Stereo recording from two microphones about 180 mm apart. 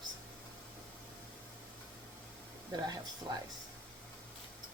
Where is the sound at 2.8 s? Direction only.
20° right (ahead or behind).